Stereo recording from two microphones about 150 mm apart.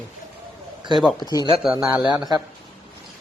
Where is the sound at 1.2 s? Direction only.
25° left (ahead or behind).